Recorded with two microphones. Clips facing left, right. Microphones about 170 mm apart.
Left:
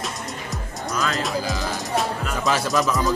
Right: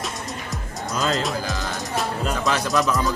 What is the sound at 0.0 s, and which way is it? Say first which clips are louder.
Music: even; centre (ahead or behind).